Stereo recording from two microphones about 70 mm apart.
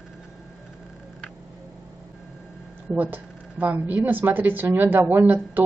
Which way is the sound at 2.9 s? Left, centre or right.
Right.